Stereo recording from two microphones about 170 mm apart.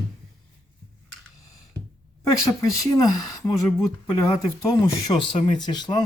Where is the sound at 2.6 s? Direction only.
20° left (ahead or behind).